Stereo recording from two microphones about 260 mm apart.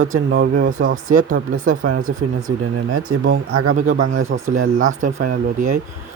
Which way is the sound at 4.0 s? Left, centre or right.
Right.